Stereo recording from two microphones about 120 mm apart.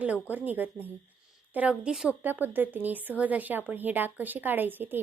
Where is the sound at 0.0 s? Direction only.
15° right (ahead or behind).